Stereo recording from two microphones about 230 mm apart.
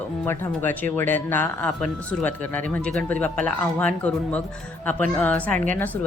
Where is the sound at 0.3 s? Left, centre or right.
Centre.